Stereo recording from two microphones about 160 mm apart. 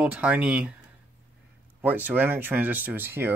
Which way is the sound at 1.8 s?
10° right (ahead or behind).